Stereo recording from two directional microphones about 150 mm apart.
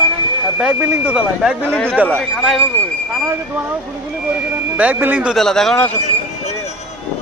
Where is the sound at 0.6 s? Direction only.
10° right (ahead or behind).